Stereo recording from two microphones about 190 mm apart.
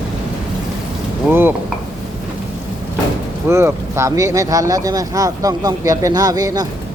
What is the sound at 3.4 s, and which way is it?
Speech, 15° right (ahead or behind).